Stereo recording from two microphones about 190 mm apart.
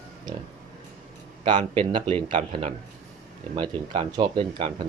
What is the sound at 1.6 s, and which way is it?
Speech, 25° right (ahead or behind).